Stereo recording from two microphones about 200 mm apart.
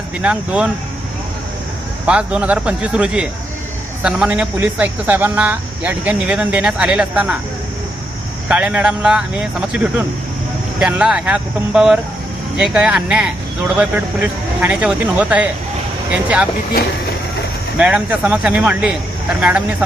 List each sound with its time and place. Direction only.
0.2 s speech: 5° right (ahead or behind)
2.0 s speech: 5° right (ahead or behind)
8.4 s speech: 5° right (ahead or behind)
17.7 s speech: 5° right (ahead or behind)